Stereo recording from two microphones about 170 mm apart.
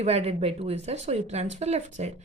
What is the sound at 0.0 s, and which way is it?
A woman's voice, 35° right (ahead or behind).